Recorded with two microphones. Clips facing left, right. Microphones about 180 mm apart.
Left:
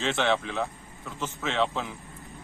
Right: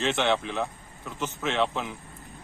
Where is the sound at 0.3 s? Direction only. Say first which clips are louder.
Even; 15° right (ahead or behind).